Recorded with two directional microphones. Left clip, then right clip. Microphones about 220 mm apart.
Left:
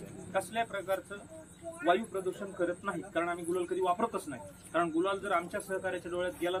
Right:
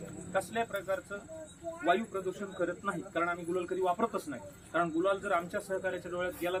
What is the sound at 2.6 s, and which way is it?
Speech, centre (ahead or behind).